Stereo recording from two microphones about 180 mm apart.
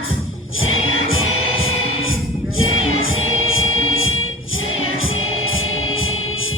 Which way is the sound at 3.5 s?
90° left.